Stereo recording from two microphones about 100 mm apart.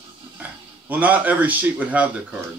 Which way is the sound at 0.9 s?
15° right (ahead or behind).